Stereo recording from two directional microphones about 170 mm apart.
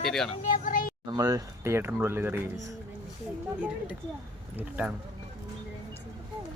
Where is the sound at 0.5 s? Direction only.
55° left (ahead or behind).